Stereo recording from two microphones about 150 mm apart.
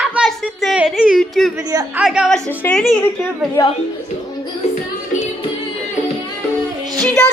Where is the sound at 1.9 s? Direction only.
5° right (ahead or behind).